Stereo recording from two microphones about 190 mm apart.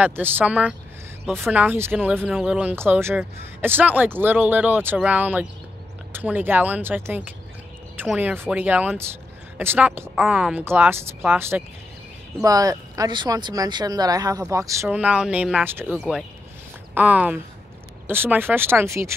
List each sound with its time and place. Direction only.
0.0 s speech: 10° right (ahead or behind)
14.9 s speech: 5° right (ahead or behind)